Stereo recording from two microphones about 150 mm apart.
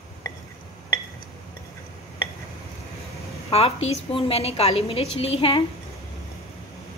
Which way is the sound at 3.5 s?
40° left (ahead or behind).